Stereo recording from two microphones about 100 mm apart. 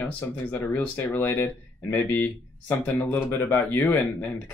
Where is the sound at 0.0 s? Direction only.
20° left (ahead or behind).